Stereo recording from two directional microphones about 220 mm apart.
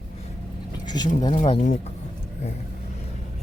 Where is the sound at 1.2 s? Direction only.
25° left (ahead or behind).